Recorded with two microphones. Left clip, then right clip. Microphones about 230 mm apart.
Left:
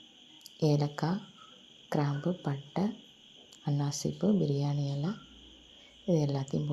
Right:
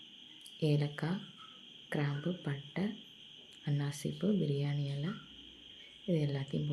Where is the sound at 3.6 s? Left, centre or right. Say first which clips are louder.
Left 6 dB; centre.